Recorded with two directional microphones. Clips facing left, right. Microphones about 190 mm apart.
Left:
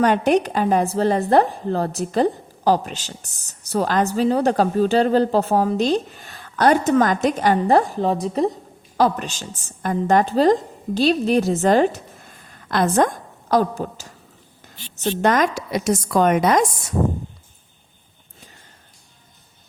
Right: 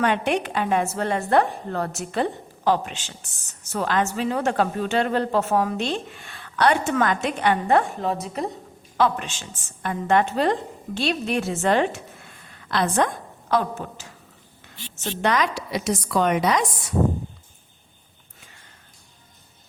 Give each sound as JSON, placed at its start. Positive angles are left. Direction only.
{"t": 0.0, "sound": "a woman's voice", "side_deg": 40}